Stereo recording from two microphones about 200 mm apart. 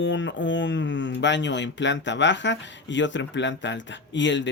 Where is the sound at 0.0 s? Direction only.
65° left (ahead or behind).